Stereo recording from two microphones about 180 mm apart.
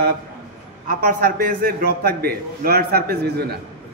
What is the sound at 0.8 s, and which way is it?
A man's voice, 55° right (ahead or behind).